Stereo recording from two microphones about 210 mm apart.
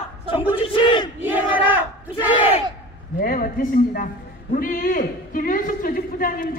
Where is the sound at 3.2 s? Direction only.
40° left (ahead or behind).